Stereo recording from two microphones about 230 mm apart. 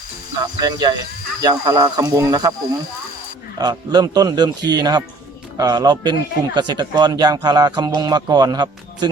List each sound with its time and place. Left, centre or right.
0.6 s speech: centre
3.6 s speech: centre